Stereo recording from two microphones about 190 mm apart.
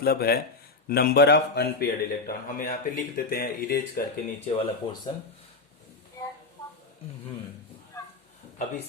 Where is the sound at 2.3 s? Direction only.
45° left (ahead or behind).